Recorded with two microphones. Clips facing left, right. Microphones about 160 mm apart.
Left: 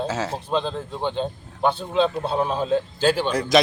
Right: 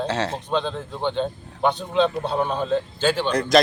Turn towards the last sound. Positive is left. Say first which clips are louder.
# even
turn(degrees=5)  # may be behind; listen again after turning